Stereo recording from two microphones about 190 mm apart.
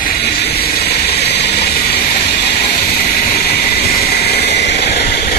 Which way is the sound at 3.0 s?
55° left (ahead or behind).